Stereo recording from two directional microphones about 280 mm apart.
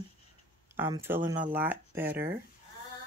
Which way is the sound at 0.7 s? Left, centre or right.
Centre.